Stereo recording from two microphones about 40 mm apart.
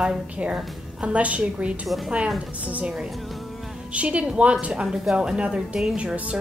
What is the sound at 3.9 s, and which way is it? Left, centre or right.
Speech, right.